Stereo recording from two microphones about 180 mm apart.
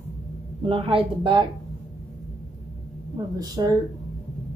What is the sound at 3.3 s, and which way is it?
Speech, 20° right (ahead or behind).